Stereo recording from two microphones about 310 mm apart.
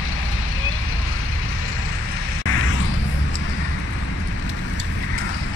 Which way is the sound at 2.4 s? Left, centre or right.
Left.